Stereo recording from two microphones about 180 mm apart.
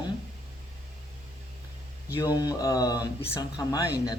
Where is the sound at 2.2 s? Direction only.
20° left (ahead or behind).